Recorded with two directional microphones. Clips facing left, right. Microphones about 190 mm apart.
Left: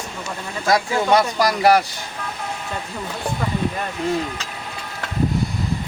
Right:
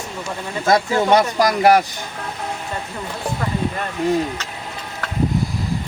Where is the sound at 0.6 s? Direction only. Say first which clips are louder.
Right 2 dB; 25° right (ahead or behind).